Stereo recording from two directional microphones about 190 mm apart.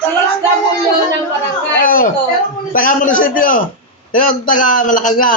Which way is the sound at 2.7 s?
45° left (ahead or behind).